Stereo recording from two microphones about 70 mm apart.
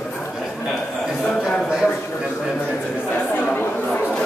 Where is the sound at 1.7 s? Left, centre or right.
Centre.